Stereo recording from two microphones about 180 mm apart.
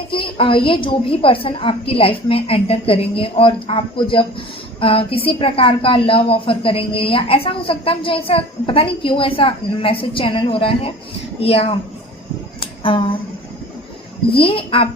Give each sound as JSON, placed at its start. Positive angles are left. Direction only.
{"t": 0.1, "sound": "a woman's voice", "side_deg": 30}
{"t": 12.5, "sound": "a sound", "side_deg": 30}
{"t": 14.3, "sound": "a woman's voice", "side_deg": 30}